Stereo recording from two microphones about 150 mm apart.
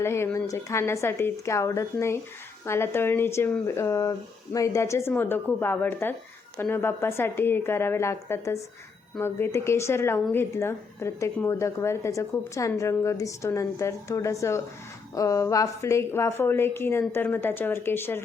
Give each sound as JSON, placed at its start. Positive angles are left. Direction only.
{"t": 0.0, "sound": "a woman's voice", "side_deg": 15}